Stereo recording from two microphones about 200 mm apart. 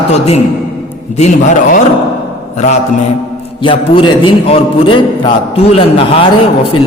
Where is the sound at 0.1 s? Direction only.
30° left (ahead or behind).